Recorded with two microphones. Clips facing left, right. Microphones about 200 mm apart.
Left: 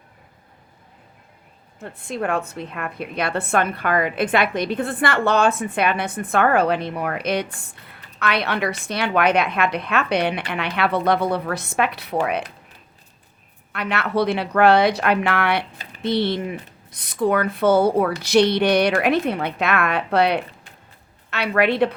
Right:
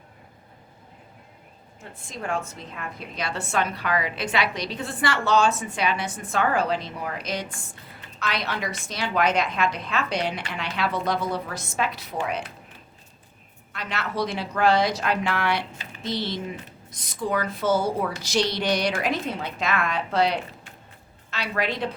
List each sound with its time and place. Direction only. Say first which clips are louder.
1.8 s a woman's voice: left 9 dB; 60° left (ahead or behind)
13.7 s a woman's voice: left 7 dB; 60° left (ahead or behind)